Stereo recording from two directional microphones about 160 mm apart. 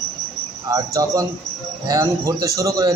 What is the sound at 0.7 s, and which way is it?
A man's voice, 20° right (ahead or behind).